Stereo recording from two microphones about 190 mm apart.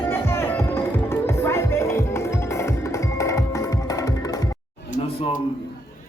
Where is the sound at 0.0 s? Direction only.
10° left (ahead or behind).